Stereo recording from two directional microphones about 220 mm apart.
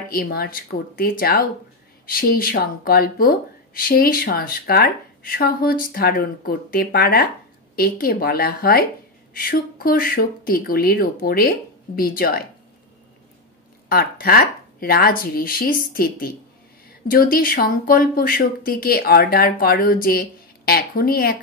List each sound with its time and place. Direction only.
0.1 s speech: 45° left (ahead or behind)
13.8 s speech: 40° left (ahead or behind)